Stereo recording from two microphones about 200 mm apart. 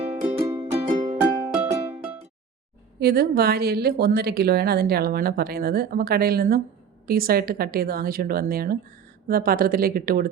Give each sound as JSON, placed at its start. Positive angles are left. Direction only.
{"t": 0.0, "sound": "music", "side_deg": -25}
{"t": 3.0, "sound": "speech", "side_deg": -50}